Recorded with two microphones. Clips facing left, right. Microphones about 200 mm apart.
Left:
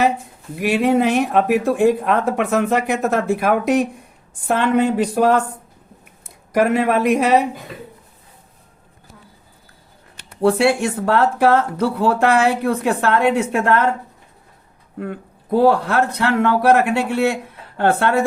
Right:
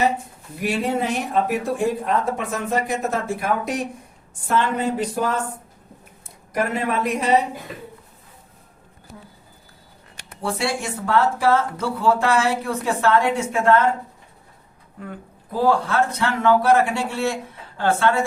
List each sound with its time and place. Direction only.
0.6 s speech: 65° left (ahead or behind)
6.5 s speech: 70° left (ahead or behind)
10.4 s speech: 60° left (ahead or behind)
14.9 s speech: 65° left (ahead or behind)